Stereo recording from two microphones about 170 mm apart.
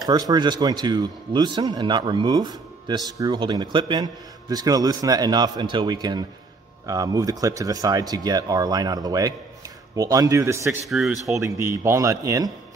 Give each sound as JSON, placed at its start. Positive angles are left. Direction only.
{"t": 0.0, "sound": "speech", "side_deg": -25}
{"t": 10.9, "sound": "speech", "side_deg": -5}
{"t": 11.2, "sound": "speech", "side_deg": -20}